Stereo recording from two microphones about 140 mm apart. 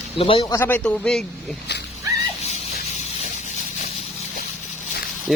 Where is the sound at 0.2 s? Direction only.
40° left (ahead or behind).